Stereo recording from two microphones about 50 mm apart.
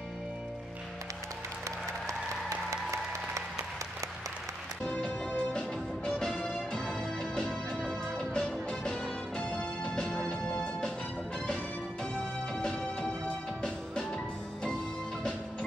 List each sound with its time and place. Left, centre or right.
2.7 s applause: right
4.8 s music: left
5.5 s music: centre
6.9 s music: centre
8.4 s music: left